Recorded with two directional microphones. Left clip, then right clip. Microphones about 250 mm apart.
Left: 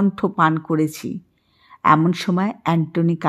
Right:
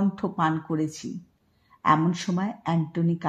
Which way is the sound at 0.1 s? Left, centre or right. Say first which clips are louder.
Left 8 dB; left.